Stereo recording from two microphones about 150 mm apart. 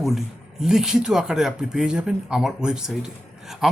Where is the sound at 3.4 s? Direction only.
Centre (ahead or behind).